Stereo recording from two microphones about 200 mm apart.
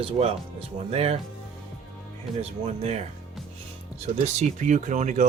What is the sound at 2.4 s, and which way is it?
Speech, 35° right (ahead or behind).